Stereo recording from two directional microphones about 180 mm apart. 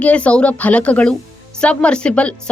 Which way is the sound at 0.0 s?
5° left (ahead or behind).